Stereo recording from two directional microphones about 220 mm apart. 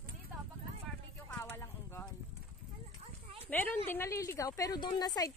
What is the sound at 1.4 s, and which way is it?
Clip-clop, 10° left (ahead or behind).